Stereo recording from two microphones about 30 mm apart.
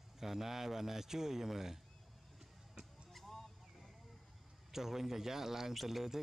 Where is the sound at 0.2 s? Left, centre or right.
Centre.